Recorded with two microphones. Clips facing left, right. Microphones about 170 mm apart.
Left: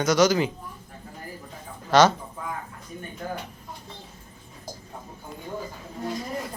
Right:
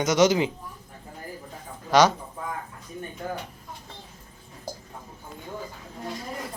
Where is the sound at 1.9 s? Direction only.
10° right (ahead or behind).